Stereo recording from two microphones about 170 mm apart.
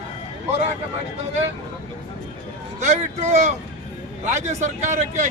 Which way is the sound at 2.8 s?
45° right (ahead or behind).